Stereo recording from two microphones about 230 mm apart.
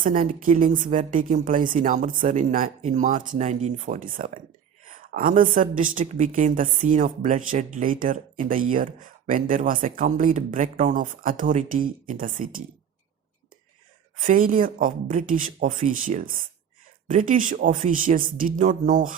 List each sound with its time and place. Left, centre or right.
0.0 s speech: right
14.2 s speech: right